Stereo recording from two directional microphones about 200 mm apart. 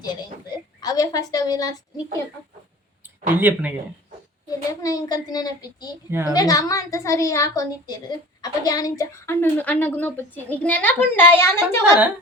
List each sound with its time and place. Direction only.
0.0 s a woman's voice: 20° left (ahead or behind)
3.2 s speech: 10° right (ahead or behind)
4.4 s a child's voice: 20° left (ahead or behind)
6.1 s speech: 10° right (ahead or behind)
6.3 s a woman's voice: 20° left (ahead or behind)